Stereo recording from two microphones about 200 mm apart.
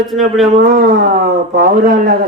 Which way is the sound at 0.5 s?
45° right (ahead or behind).